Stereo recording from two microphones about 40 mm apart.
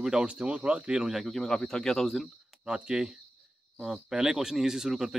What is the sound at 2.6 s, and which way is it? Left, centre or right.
Speech, right.